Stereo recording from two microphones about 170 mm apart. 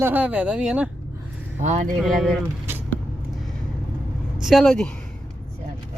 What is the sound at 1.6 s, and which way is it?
Speech, 45° right (ahead or behind).